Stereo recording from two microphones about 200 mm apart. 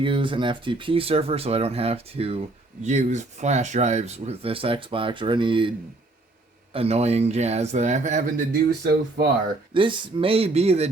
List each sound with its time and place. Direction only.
0.0 s speech: 25° right (ahead or behind)
6.7 s speech: 30° right (ahead or behind)
8.8 s speech: 55° right (ahead or behind)
9.7 s speech: 25° right (ahead or behind)